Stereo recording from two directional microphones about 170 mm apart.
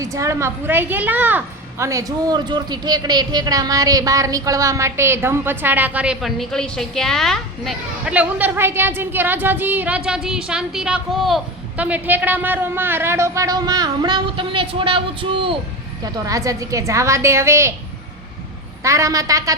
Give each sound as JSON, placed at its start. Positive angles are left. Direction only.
{"t": 0.0, "sound": "a woman's voice", "side_deg": -20}
{"t": 18.8, "sound": "a man's voice", "side_deg": -20}